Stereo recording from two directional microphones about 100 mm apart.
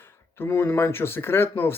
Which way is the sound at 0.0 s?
20° left (ahead or behind).